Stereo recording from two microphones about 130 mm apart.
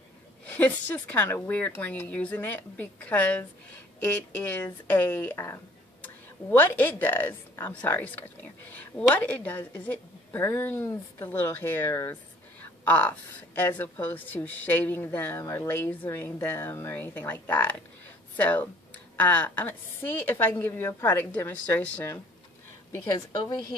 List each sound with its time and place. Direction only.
0.5 s a woman's voice: 10° left (ahead or behind)
23.1 s a woman's voice: 35° left (ahead or behind)